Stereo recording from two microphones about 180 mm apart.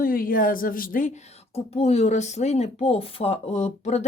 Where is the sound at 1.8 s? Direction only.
35° left (ahead or behind).